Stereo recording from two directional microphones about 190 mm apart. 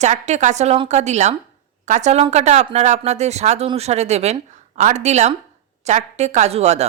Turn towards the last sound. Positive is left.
turn(degrees=-35)  # may be behind; listen again after turning